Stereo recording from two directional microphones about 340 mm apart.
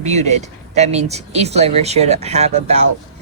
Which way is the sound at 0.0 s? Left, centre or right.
Centre.